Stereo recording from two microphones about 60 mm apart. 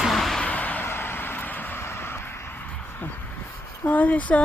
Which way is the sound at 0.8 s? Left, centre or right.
Left.